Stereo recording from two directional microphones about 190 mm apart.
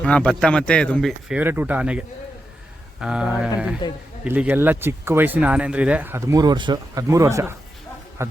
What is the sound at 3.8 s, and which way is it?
Speech, 20° left (ahead or behind).